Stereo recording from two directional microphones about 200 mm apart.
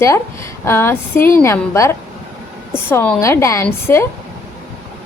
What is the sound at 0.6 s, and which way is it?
Speech, 10° left (ahead or behind).